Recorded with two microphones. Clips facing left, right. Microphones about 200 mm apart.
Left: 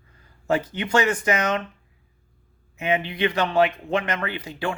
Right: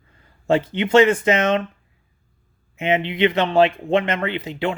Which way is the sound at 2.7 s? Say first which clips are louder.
Right 4 dB; 25° right (ahead or behind).